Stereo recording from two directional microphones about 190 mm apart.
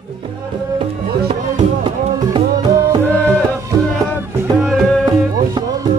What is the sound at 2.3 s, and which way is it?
Music, 20° right (ahead or behind).